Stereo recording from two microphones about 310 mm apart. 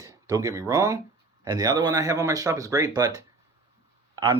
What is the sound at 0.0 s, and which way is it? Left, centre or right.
Speech, centre.